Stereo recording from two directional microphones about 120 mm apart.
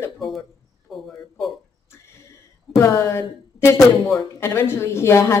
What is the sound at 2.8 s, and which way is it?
A woman's voice, 20° left (ahead or behind).